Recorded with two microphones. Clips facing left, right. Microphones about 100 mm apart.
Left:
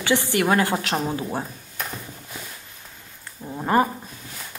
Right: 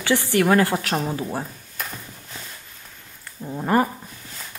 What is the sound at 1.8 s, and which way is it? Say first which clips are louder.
Horse: left 1 dB; 5° left (ahead or behind).